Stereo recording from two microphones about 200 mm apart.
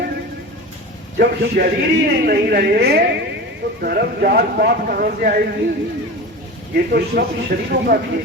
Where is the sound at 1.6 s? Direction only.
55° right (ahead or behind).